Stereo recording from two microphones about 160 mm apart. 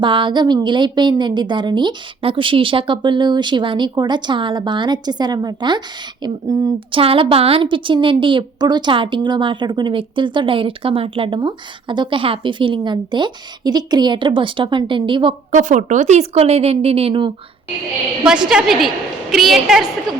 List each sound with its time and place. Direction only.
0.0 s a woman's voice: 30° right (ahead or behind)
15.5 s a woman's voice: 50° right (ahead or behind); by 17.3 s 35° right (ahead or behind)
18.4 s a woman's voice: centre (ahead or behind)